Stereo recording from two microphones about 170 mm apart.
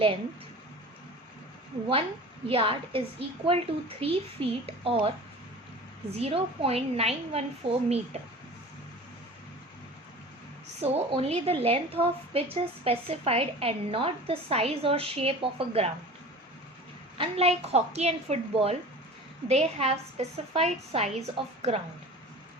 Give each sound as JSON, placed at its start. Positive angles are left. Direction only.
{"t": 2.5, "sound": "a woman's voice", "side_deg": -30}
{"t": 10.8, "sound": "a woman's voice", "side_deg": -35}
{"t": 17.2, "sound": "a woman's voice", "side_deg": -35}